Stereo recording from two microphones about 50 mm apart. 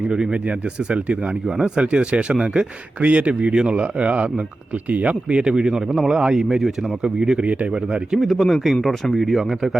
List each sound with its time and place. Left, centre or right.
0.1 s speech: centre
8.2 s speech: centre